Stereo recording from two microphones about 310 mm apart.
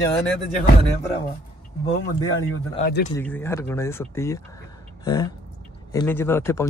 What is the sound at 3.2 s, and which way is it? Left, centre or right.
A man's voice, centre.